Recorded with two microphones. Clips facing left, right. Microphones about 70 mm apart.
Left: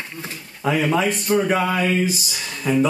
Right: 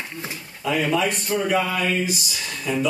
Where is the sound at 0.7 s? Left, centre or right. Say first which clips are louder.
Left 2 dB; left.